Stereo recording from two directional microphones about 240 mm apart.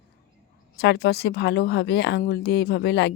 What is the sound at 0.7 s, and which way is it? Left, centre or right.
Speech, left.